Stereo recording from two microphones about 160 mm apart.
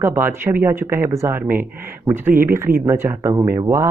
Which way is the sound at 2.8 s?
15° right (ahead or behind).